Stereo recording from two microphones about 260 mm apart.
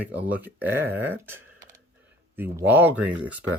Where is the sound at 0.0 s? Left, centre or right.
Centre.